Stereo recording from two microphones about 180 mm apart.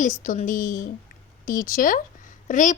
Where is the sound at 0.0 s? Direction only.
45° left (ahead or behind).